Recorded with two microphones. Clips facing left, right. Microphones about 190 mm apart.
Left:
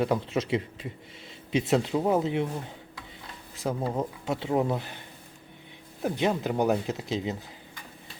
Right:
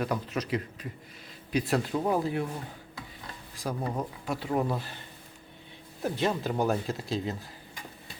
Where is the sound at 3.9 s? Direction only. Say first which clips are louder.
Left 3 dB; 25° left (ahead or behind).